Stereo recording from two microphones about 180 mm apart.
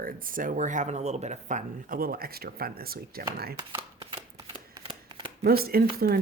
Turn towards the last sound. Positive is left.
turn(degrees=-55)  # may be behind; listen again after turning